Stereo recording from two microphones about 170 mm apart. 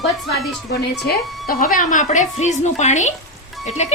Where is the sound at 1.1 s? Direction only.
65° left (ahead or behind).